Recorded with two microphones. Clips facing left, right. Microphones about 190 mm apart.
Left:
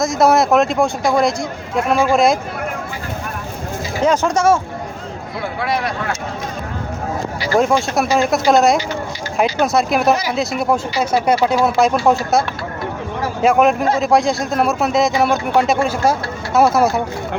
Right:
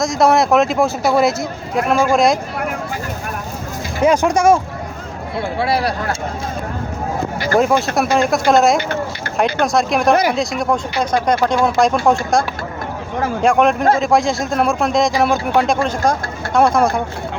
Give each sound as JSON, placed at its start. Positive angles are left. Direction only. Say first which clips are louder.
{"t": 0.0, "sound": "speech", "louder": "even", "side_deg": 0}
{"t": 4.0, "sound": "speech", "louder": "right 2 dB", "side_deg": -10}
{"t": 5.5, "sound": "speech", "louder": "right 3 dB", "side_deg": -30}
{"t": 7.6, "sound": "speech", "louder": "even", "side_deg": 0}
{"t": 13.4, "sound": "speech", "louder": "left 1 dB", "side_deg": 5}